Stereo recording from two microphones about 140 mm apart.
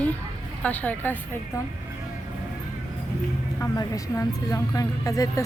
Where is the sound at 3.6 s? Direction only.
25° left (ahead or behind).